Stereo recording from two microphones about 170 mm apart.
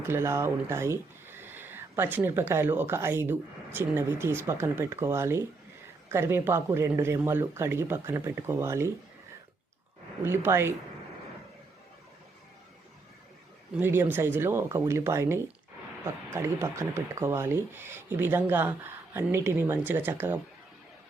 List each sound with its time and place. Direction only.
0.1 s speech: 15° right (ahead or behind)
10.2 s speech: 15° right (ahead or behind)
13.7 s speech: 10° right (ahead or behind)